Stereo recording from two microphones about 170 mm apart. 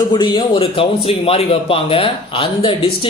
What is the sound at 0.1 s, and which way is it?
A man's voice, 25° left (ahead or behind).